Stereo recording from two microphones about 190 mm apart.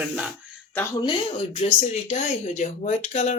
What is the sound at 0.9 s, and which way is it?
Speech, 25° left (ahead or behind).